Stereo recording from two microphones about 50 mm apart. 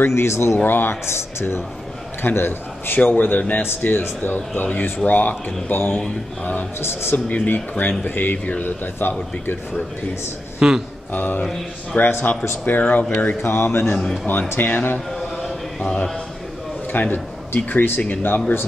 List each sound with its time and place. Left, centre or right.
0.0 s speech: left
0.7 s speech: left
2.2 s a man's voice: left
3.6 s speech: left
6.8 s speech: left
7.2 s speech: left
10.6 s speech: centre
11.1 s speech: left
13.4 s speech: left
13.8 s a man's voice: centre
14.6 s speech: left
15.8 s a man's voice: left
16.9 s speech: left